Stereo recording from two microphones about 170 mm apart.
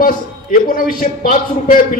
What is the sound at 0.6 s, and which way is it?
A man's voice, 55° left (ahead or behind).